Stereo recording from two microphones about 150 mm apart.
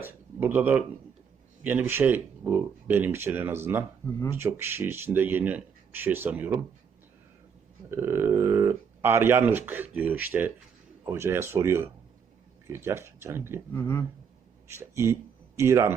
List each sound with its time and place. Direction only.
0.0 s a sound: 10° right (ahead or behind)
1.6 s speech: 15° right (ahead or behind)
7.9 s speech: 15° right (ahead or behind)
13.7 s speech: 15° left (ahead or behind)
14.7 s speech: 15° right (ahead or behind)